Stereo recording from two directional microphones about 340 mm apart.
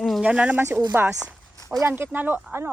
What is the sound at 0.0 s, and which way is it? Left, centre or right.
Speech, centre.